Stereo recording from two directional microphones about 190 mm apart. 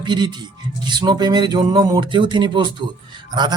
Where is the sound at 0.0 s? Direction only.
25° right (ahead or behind).